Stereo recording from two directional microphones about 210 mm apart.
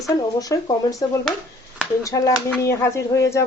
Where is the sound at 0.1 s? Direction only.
15° left (ahead or behind).